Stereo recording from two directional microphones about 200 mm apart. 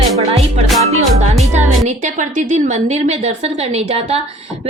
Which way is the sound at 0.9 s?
35° right (ahead or behind).